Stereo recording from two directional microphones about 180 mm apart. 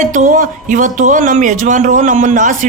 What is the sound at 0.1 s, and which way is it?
Speech, 45° right (ahead or behind).